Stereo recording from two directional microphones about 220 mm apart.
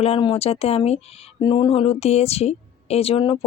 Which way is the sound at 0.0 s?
25° left (ahead or behind).